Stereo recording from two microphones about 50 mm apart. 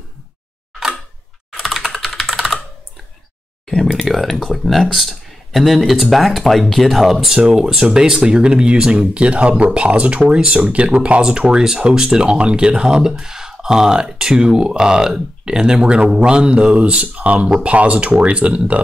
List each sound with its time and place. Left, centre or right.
1.6 s computer keyboard: centre
3.6 s speech: centre
7.3 s speech: right